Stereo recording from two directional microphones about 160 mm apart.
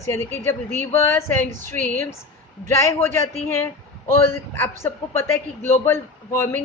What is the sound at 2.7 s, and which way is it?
A man's voice, 20° left (ahead or behind).